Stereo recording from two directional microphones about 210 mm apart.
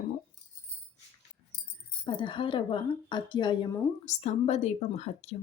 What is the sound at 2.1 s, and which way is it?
A woman's voice, 25° left (ahead or behind).